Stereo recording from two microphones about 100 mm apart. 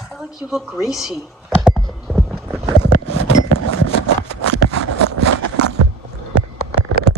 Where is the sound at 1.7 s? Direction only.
5° left (ahead or behind).